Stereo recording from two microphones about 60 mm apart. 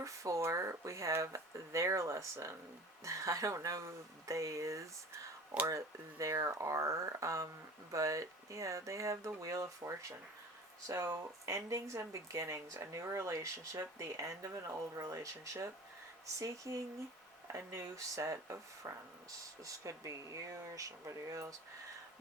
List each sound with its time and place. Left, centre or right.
0.0 s speech: right
17.5 s speech: right
18.1 s speech: right